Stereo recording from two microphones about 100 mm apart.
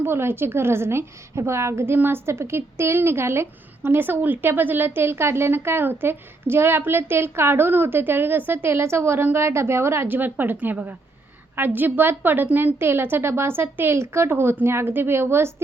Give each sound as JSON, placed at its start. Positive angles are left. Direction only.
{"t": 0.0, "sound": "a woman's voice", "side_deg": -25}